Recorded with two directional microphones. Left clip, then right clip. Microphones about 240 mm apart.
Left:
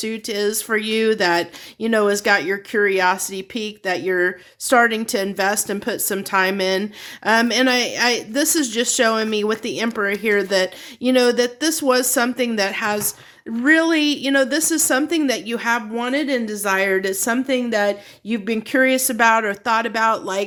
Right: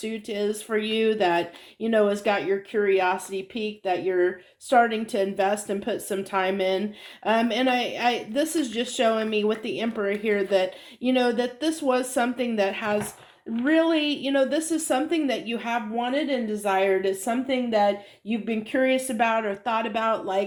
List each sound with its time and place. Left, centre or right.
0.0 s a woman's voice: left